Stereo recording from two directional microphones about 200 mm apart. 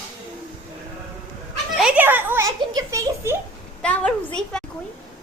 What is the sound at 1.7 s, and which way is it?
A child's voice, 5° right (ahead or behind).